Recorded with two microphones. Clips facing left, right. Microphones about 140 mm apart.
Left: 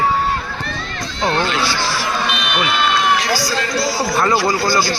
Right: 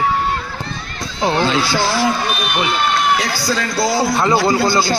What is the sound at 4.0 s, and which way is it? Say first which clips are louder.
Speech: right 1 dB; 25° right (ahead or behind).